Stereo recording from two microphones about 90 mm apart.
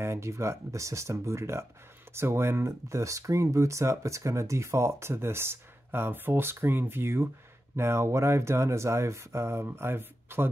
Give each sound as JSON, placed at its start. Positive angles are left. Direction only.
{"t": 0.0, "sound": "speech", "side_deg": -30}